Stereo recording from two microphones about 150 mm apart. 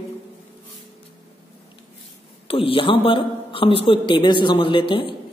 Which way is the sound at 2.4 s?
40° left (ahead or behind).